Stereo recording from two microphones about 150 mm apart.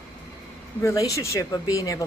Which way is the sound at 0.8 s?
20° left (ahead or behind).